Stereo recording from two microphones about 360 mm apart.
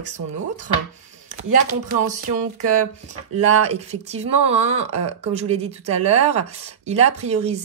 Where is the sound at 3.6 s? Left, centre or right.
Centre.